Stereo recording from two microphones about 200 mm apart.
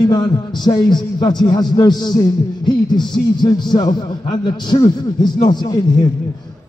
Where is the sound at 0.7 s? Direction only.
20° left (ahead or behind).